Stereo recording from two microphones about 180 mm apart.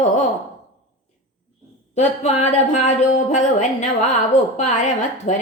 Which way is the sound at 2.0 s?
40° left (ahead or behind).